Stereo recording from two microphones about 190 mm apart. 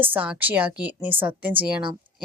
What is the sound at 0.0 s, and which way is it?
A woman's voice, 10° right (ahead or behind).